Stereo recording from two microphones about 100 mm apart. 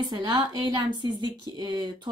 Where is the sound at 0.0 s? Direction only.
45° right (ahead or behind).